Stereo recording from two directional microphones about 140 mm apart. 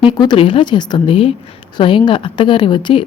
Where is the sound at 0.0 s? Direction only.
35° left (ahead or behind).